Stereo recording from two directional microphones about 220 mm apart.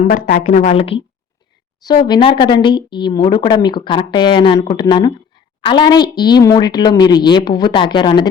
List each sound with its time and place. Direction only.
0.0 s a woman's voice: 40° left (ahead or behind)
2.0 s a woman's voice: 20° left (ahead or behind)